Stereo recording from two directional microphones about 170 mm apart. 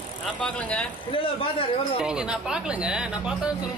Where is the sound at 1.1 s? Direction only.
30° left (ahead or behind).